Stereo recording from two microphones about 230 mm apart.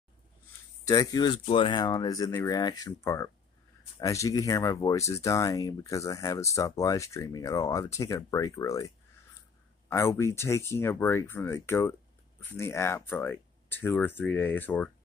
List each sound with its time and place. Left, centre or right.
0.8 s speech: centre